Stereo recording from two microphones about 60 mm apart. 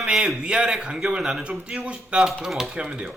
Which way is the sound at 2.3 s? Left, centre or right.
Centre.